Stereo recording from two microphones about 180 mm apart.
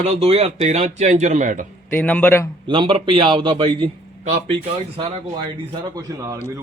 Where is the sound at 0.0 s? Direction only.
35° right (ahead or behind).